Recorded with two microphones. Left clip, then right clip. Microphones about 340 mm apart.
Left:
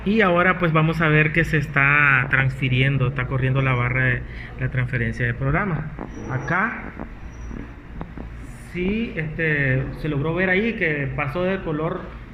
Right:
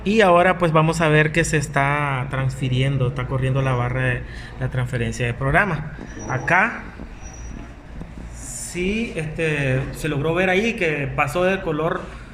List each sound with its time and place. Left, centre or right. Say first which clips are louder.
0.0 s speech: right 3 dB; right
8.7 s speech: right 1 dB; right